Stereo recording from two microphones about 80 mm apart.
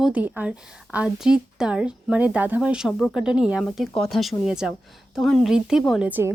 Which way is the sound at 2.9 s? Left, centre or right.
Centre.